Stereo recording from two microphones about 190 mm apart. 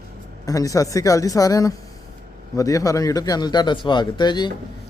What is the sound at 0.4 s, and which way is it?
A man's voice, 20° left (ahead or behind).